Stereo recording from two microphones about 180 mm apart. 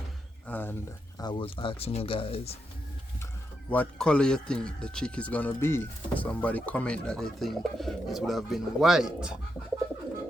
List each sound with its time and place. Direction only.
0.4 s a sound: 10° left (ahead or behind)
1.2 s speech: 25° left (ahead or behind)
3.7 s a man's voice: 5° left (ahead or behind)